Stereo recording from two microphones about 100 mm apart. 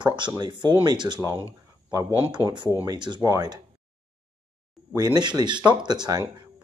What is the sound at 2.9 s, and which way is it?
Speech, 45° right (ahead or behind).